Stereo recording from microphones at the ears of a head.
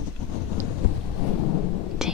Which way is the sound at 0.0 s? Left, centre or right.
Left.